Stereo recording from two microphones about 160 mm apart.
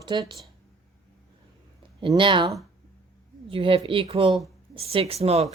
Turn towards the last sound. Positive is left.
turn(degrees=-40)  # may be behind; listen again after turning